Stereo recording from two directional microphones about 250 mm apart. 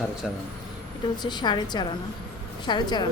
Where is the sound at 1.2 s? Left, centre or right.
Centre.